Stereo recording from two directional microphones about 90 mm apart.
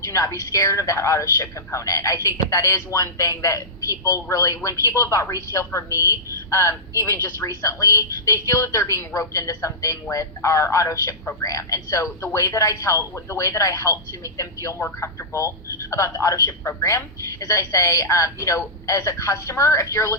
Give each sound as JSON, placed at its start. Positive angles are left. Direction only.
{"t": 0.0, "sound": "a woman's voice", "side_deg": 35}